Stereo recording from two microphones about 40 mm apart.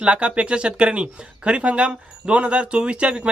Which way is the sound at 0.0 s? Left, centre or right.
Right.